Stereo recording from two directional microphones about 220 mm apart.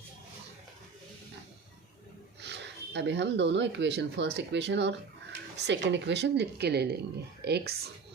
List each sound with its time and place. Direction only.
2.4 s speech: 50° right (ahead or behind)